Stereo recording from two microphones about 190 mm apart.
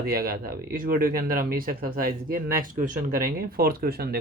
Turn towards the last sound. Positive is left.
turn(degrees=-55)  # may be behind; listen again after turning